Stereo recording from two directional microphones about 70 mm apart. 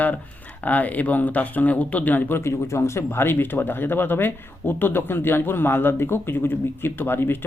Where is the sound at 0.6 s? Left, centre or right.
Left.